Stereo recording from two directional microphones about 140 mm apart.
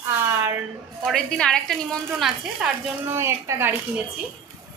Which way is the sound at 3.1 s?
20° right (ahead or behind).